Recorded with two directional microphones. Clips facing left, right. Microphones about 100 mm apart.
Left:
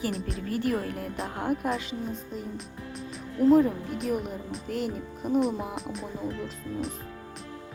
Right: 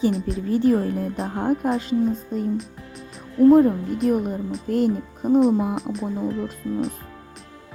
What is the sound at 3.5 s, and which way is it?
A woman's voice, 50° right (ahead or behind).